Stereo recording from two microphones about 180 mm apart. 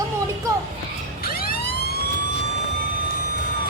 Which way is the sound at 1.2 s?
55° left (ahead or behind).